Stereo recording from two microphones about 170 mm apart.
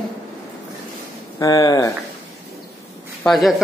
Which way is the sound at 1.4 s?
20° left (ahead or behind).